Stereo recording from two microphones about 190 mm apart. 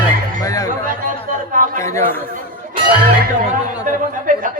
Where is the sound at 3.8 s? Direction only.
45° right (ahead or behind).